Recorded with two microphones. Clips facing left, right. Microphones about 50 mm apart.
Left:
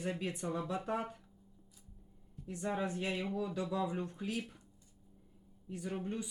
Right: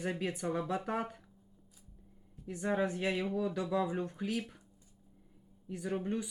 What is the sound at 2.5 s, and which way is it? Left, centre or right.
Speech, centre.